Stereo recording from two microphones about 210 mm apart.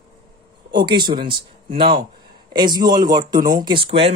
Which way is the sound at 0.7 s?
20° right (ahead or behind).